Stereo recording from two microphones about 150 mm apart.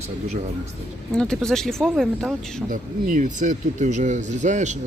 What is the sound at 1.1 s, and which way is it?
Speech, 5° left (ahead or behind).